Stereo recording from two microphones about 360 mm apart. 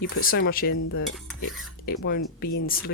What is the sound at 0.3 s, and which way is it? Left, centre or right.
Speech, left.